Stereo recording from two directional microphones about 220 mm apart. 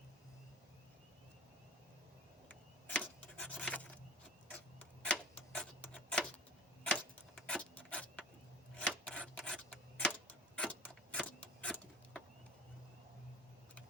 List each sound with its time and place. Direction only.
2.5 s a sound: 5° left (ahead or behind)
4.5 s tick-tock: 5° left (ahead or behind)
8.7 s rub: 5° left (ahead or behind)